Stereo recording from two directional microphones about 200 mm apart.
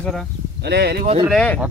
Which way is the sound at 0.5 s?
55° right (ahead or behind).